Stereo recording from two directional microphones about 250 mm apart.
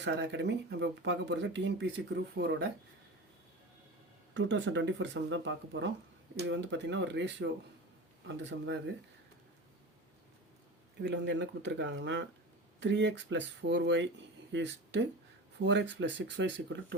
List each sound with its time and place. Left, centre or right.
0.0 s speech: right
4.4 s speech: right
8.4 s speech: right
11.0 s speech: right